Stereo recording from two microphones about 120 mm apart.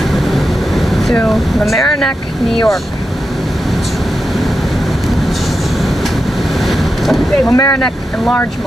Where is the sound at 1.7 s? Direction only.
5° left (ahead or behind).